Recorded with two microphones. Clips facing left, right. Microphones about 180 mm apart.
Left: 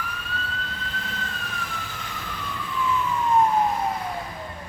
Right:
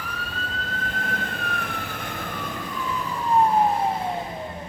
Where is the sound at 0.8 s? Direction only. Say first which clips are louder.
Right 4 dB; 50° right (ahead or behind); by 4.2 s 25° right (ahead or behind).